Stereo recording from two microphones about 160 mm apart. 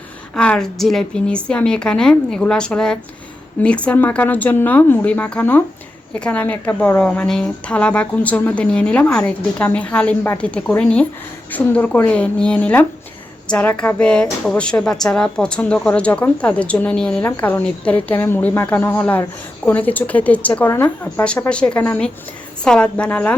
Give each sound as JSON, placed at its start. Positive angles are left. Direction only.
{"t": 0.3, "sound": "a woman's voice", "side_deg": 5}